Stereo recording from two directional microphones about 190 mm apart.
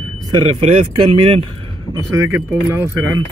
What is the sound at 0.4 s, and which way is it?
A man's voice, 25° right (ahead or behind).